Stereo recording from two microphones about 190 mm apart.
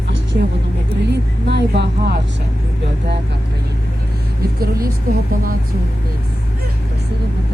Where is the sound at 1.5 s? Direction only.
65° right (ahead or behind).